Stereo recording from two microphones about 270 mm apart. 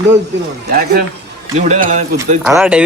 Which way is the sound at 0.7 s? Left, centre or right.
Right.